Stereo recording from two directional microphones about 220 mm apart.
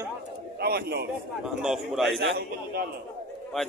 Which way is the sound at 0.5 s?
45° right (ahead or behind).